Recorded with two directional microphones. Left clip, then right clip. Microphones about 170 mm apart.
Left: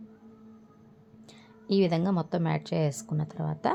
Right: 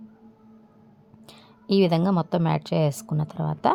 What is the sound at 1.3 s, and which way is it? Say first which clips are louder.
A woman's voice: right 5 dB; 45° right (ahead or behind).